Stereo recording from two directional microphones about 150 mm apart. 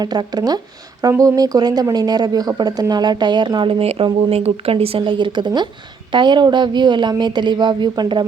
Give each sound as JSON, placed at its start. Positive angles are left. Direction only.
{"t": 0.0, "sound": "a woman's voice", "side_deg": -25}